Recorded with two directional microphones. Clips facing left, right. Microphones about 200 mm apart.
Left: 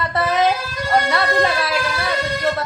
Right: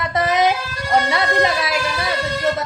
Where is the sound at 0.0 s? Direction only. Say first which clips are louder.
Right 1 dB; 15° right (ahead or behind).